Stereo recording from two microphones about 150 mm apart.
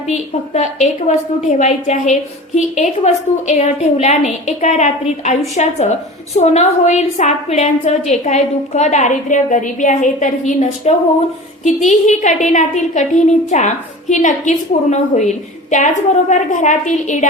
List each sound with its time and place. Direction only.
0.1 s a woman's voice: 50° left (ahead or behind)